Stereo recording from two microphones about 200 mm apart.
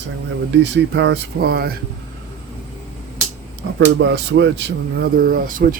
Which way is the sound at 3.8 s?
60° right (ahead or behind).